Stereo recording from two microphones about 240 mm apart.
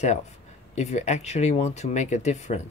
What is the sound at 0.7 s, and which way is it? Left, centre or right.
Speech, left.